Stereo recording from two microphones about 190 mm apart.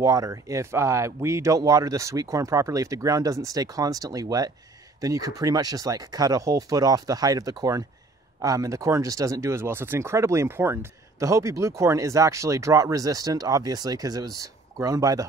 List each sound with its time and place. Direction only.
0.0 s speech: 20° right (ahead or behind)